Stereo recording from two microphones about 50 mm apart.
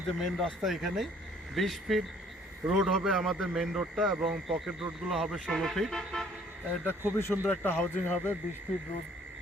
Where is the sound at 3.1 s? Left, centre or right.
Centre.